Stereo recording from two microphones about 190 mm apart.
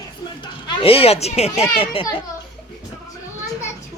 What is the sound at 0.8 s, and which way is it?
A child's voice, 30° left (ahead or behind).